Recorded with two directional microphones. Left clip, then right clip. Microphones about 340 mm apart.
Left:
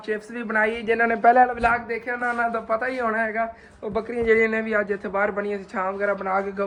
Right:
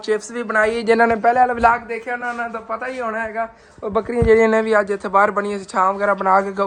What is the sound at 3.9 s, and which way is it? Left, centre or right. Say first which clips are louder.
A man's voice: right 6 dB; centre.